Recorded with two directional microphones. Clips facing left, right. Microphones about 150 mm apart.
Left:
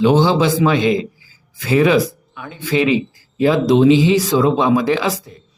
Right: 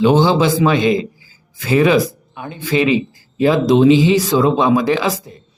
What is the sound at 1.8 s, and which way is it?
Speech, 40° right (ahead or behind).